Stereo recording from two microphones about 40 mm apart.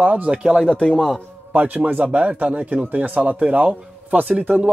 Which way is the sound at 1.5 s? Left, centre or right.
Right.